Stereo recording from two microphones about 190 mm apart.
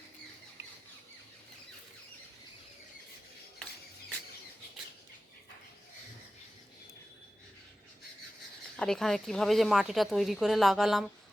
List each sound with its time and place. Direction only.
8.7 s speech: 5° left (ahead or behind)